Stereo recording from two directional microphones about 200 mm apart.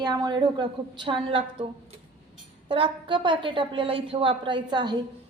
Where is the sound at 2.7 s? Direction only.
25° right (ahead or behind).